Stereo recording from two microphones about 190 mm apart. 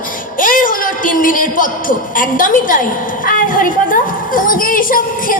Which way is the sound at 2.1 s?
45° left (ahead or behind).